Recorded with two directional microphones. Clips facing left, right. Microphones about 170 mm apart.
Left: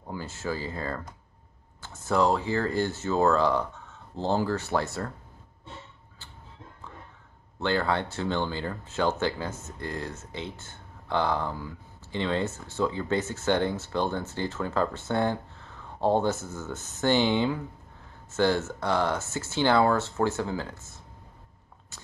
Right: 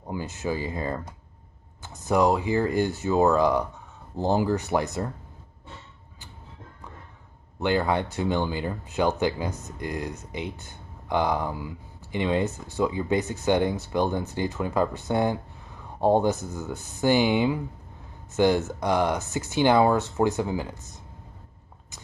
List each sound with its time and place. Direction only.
0.0 s speech: 15° right (ahead or behind)
7.6 s speech: 15° right (ahead or behind)